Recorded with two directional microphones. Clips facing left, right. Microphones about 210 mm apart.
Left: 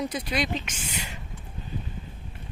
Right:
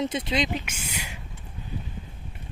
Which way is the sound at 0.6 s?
10° right (ahead or behind).